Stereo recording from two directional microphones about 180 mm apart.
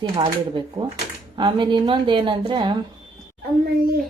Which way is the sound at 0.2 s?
25° right (ahead or behind).